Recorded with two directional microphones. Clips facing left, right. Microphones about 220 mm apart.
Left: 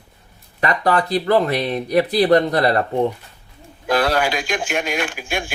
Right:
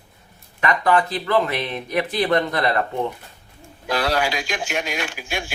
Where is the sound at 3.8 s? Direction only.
50° left (ahead or behind).